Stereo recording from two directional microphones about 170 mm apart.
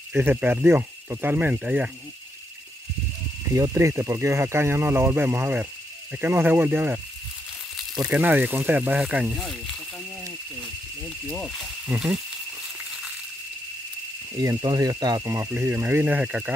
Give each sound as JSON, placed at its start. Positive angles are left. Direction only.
{"t": 0.1, "sound": "speech", "side_deg": -15}
{"t": 3.5, "sound": "speech", "side_deg": -20}
{"t": 8.0, "sound": "speech", "side_deg": -10}
{"t": 11.2, "sound": "speech", "side_deg": 5}
{"t": 14.3, "sound": "speech", "side_deg": -20}